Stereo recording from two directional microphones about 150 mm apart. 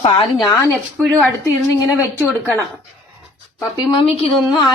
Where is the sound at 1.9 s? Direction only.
15° left (ahead or behind).